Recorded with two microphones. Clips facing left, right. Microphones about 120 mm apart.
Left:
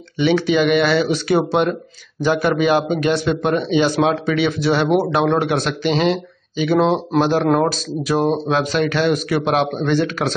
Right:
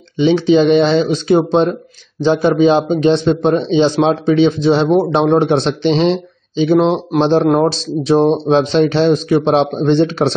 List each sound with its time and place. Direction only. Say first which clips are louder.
0.2 s a man's voice: right 5 dB; 25° right (ahead or behind)
7.7 s a man's voice: right 6 dB; 25° right (ahead or behind)